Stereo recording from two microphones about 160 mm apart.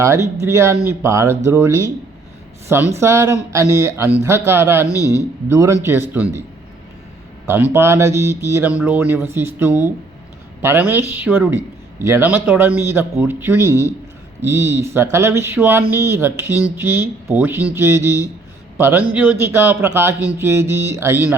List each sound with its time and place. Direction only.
0.0 s a man's voice: 20° right (ahead or behind)
7.4 s a man's voice: 15° right (ahead or behind)